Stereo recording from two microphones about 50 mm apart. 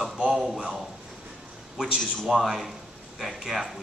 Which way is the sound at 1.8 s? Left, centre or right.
Centre.